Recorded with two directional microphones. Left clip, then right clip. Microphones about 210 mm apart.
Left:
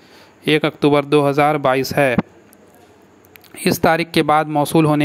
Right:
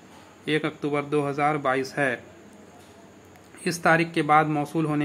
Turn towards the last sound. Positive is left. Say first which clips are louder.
# left 11 dB
turn(degrees=40)  # may be behind; listen again after turning